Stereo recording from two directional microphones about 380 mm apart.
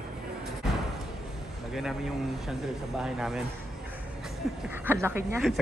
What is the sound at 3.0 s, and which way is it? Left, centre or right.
Speech, centre.